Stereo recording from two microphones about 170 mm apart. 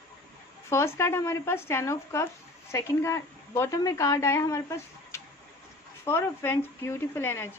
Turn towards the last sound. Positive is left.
turn(degrees=15)  # may be behind; listen again after turning